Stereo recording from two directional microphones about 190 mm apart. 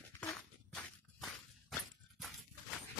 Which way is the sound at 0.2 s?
5° left (ahead or behind).